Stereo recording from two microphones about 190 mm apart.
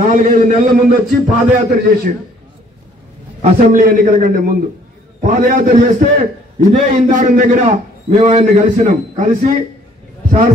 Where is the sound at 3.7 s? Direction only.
45° right (ahead or behind).